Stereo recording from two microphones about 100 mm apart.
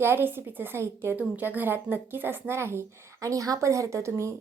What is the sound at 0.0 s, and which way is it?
A woman's voice, 20° right (ahead or behind).